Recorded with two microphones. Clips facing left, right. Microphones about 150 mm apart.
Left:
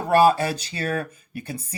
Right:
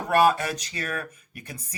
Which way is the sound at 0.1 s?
30° left (ahead or behind).